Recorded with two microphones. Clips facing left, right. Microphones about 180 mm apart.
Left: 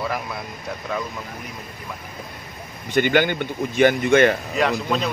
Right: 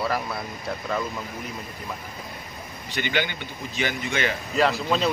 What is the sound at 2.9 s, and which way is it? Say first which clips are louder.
Speech: left 9 dB; 50° left (ahead or behind).